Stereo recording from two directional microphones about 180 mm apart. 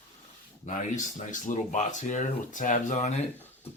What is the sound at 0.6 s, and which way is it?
Speech, 40° left (ahead or behind).